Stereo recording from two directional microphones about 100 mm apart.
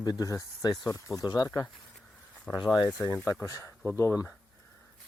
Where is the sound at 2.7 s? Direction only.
40° left (ahead or behind).